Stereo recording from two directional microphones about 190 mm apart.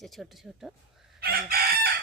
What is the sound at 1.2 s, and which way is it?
Chicken, 55° right (ahead or behind).